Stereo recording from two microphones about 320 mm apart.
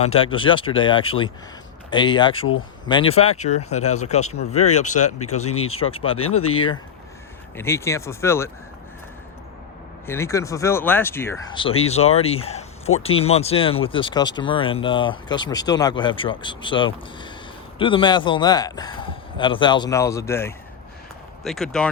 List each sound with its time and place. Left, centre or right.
0.0 s speech: centre
10.1 s speech: centre